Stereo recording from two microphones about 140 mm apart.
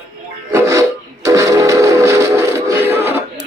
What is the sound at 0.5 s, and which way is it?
Music, 20° right (ahead or behind).